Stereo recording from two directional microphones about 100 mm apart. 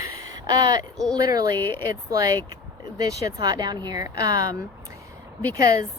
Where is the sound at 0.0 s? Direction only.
40° right (ahead or behind).